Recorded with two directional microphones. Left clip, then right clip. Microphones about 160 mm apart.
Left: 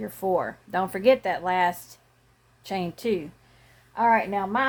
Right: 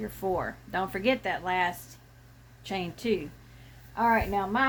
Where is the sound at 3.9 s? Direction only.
35° left (ahead or behind).